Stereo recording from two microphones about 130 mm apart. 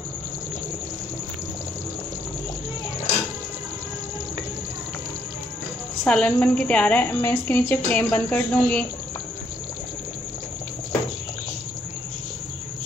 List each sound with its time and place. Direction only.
6.0 s a woman's voice: 10° left (ahead or behind)